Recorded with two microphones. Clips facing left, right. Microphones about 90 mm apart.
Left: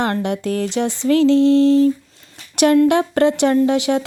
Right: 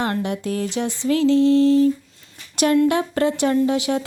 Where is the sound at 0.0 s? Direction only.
65° left (ahead or behind).